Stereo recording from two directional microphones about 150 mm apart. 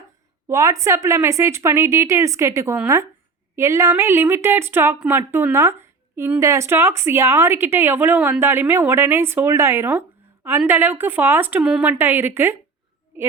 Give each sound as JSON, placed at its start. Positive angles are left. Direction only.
{"t": 0.4, "sound": "a woman's voice", "side_deg": -20}